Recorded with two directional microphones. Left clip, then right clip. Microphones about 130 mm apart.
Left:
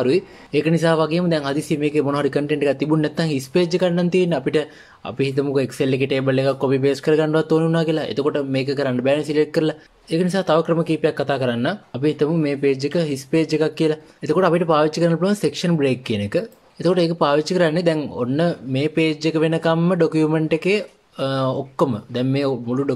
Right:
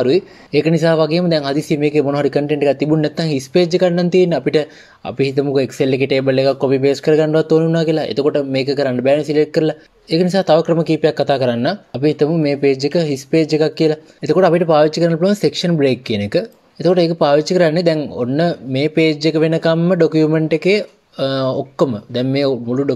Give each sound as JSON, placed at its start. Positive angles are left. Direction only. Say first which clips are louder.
{"t": 0.0, "sound": "speech", "louder": "right 4 dB", "side_deg": -15}